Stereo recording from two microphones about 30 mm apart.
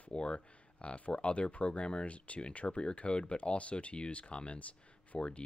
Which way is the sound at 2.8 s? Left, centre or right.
Left.